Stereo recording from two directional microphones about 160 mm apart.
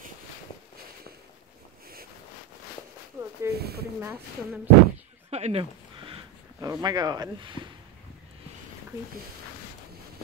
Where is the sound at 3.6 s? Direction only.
80° right.